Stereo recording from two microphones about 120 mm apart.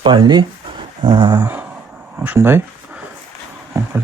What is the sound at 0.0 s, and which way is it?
Speech, 40° right (ahead or behind).